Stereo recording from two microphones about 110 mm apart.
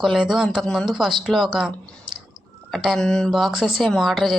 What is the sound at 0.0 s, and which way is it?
Speech, centre (ahead or behind).